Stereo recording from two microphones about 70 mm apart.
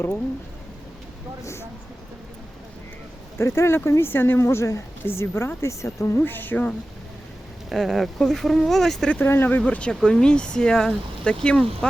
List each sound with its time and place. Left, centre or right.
3.3 s speech: left
6.1 s speech: left
7.7 s speech: centre
9.0 s speech: left; by 11.9 s centre